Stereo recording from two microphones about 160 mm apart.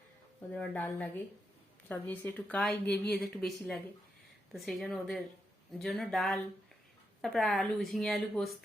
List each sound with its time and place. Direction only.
0.5 s speech: 10° left (ahead or behind)